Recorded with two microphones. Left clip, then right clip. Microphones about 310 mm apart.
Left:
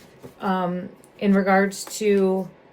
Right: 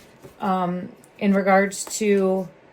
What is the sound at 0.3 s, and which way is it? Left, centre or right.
Speech, centre.